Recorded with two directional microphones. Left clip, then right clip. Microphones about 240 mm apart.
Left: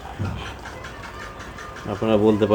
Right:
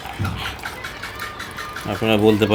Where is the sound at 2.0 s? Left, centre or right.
Right.